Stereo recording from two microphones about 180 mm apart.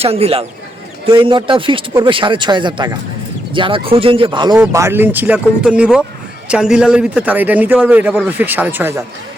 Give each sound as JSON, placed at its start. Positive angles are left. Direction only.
{"t": 0.0, "sound": "speech", "side_deg": -35}
{"t": 4.7, "sound": "a man's voice", "side_deg": -15}